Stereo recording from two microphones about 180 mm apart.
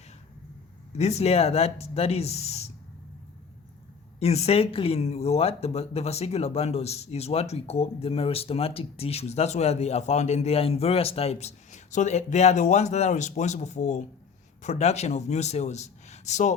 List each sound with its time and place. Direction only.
0.9 s speech: 35° left (ahead or behind)
4.2 s speech: 35° left (ahead or behind)